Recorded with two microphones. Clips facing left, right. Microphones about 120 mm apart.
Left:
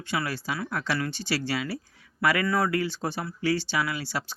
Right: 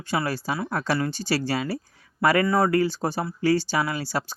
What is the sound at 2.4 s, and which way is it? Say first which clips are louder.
Speech: right 4 dB; 25° right (ahead or behind).